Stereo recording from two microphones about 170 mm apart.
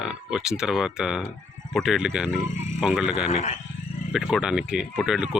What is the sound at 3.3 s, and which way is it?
Speech, 40° left (ahead or behind).